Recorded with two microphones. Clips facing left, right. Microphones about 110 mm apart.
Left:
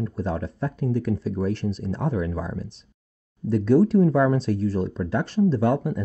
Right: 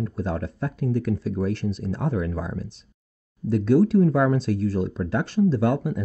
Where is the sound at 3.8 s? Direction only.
30° left (ahead or behind).